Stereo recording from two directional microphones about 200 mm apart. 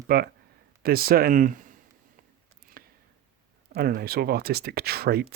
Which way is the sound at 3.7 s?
50° right (ahead or behind).